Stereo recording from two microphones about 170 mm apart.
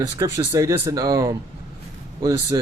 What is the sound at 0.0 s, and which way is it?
Speech, 20° right (ahead or behind).